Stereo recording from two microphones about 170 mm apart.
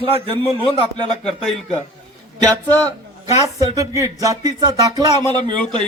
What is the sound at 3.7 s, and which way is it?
Speech, 20° right (ahead or behind).